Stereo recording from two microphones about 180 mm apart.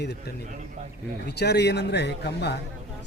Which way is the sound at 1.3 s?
65° left (ahead or behind).